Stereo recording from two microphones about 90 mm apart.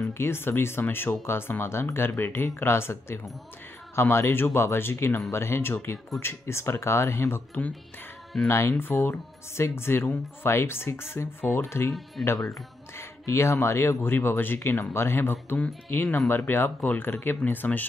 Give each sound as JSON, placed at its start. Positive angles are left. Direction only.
{"t": 0.2, "sound": "speech", "side_deg": 25}